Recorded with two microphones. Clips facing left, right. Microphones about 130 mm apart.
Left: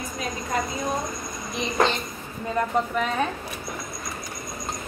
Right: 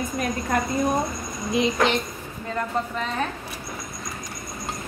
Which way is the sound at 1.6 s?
90° right.